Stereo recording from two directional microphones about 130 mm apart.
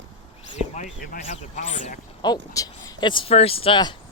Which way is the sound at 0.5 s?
70° left (ahead or behind).